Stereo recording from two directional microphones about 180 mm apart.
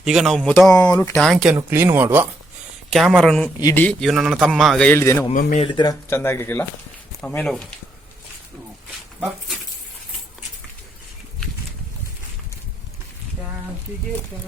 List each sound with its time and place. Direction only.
0.0 s a man's voice: 5° right (ahead or behind)
1.5 s speech: 15° right (ahead or behind)
2.9 s a man's voice: centre (ahead or behind)
3.6 s speech: 20° left (ahead or behind)
3.8 s a man's voice: centre (ahead or behind)
5.3 s speech: 45° left (ahead or behind)
5.6 s a man's voice: 25° left (ahead or behind); by 7.7 s centre (ahead or behind)